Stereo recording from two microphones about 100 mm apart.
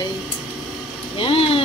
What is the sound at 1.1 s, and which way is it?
Speech, 65° left (ahead or behind).